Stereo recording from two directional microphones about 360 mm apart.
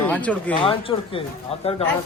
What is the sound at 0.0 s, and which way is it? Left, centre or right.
Speech, centre.